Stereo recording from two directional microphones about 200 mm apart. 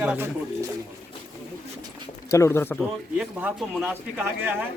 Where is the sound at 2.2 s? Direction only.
15° left (ahead or behind).